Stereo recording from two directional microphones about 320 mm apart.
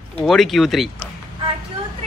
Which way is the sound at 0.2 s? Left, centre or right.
Centre.